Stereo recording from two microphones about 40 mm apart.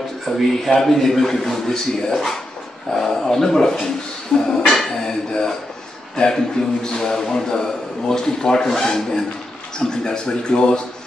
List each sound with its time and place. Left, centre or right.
0.7 s a man's voice: centre